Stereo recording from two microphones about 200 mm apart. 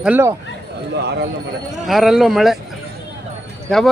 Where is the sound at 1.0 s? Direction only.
55° right (ahead or behind).